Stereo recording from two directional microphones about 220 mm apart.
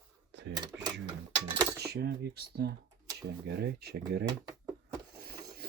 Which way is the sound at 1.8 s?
50° right (ahead or behind).